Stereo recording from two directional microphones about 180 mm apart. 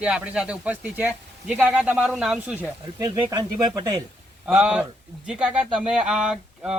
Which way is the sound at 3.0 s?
20° right (ahead or behind).